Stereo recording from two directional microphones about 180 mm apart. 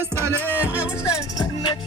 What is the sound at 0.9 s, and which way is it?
Music, 25° left (ahead or behind).